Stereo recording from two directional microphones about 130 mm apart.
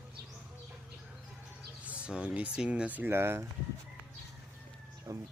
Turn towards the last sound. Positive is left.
turn(degrees=-25)  # may be behind; listen again after turning